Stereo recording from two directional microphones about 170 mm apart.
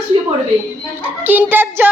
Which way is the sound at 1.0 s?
10° right (ahead or behind).